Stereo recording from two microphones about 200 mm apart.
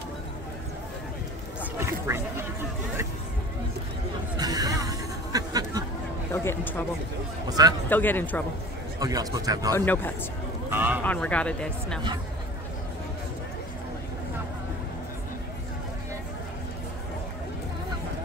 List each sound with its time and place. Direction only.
1.8 s speech: 15° right (ahead or behind)
4.4 s a sound: 20° right (ahead or behind)
6.3 s speech: 10° left (ahead or behind)
7.4 s a man's voice: 20° right (ahead or behind)
7.9 s speech: 10° left (ahead or behind)
9.0 s a man's voice: 20° right (ahead or behind)
9.8 s speech: 10° left (ahead or behind)
10.7 s speech: 10° right (ahead or behind)
11.1 s speech: 5° left (ahead or behind)